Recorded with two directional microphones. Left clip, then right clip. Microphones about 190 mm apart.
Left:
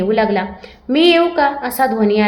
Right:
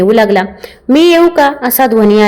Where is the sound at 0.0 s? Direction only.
40° right (ahead or behind).